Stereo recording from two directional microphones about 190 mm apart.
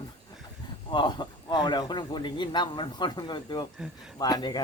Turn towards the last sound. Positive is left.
turn(degrees=20)  # may be behind; listen again after turning